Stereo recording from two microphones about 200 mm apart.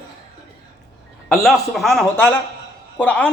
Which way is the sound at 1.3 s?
Centre (ahead or behind).